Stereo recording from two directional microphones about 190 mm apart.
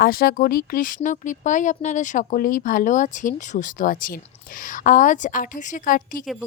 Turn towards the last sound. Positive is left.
turn(degrees=45)  # may be behind; listen again after turning